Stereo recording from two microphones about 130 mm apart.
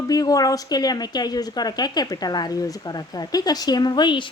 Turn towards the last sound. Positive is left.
turn(degrees=35)  # may be behind; listen again after turning